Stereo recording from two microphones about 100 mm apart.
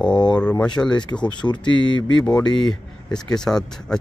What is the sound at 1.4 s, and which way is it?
Speech, 50° left (ahead or behind).